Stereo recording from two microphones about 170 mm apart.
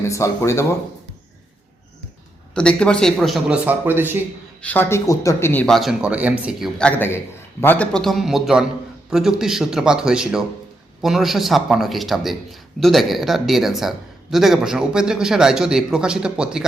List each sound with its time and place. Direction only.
0.0 s speech: 15° left (ahead or behind)
2.6 s a man's voice: 5° left (ahead or behind); by 4.2 s 10° right (ahead or behind)
4.6 s a man's voice: 10° left (ahead or behind)